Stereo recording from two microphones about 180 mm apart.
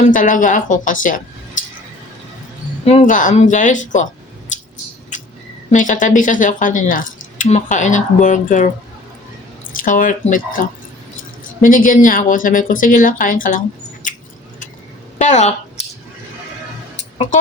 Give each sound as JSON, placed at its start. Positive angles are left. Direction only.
{"t": 0.1, "sound": "speech", "side_deg": 45}
{"t": 1.6, "sound": "squish", "side_deg": 45}
{"t": 2.8, "sound": "speech", "side_deg": 40}
{"t": 5.1, "sound": "a sound", "side_deg": 45}
{"t": 5.7, "sound": "speech", "side_deg": 45}
{"t": 9.7, "sound": "speech", "side_deg": 45}
{"t": 15.2, "sound": "speech", "side_deg": 40}